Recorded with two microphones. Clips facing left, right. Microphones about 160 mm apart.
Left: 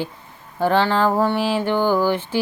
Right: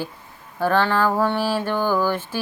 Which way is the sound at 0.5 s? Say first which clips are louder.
Left 2 dB; 20° left (ahead or behind).